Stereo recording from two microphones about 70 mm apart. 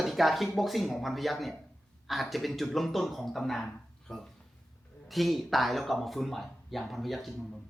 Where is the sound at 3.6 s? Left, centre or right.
Centre.